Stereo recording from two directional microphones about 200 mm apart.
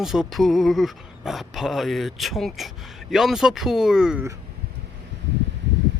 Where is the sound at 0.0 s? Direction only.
Centre (ahead or behind).